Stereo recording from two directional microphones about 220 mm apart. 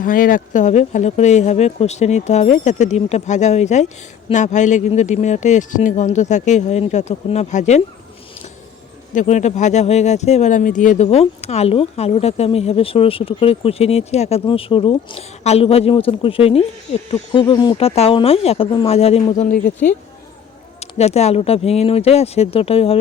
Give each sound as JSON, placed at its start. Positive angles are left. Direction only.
{"t": 0.0, "sound": "speech", "side_deg": 40}
{"t": 9.1, "sound": "speech", "side_deg": 30}